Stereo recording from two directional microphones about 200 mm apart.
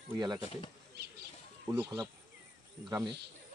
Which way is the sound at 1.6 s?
15° right (ahead or behind).